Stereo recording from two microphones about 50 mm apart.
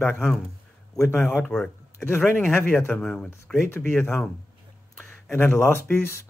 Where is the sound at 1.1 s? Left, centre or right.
Left.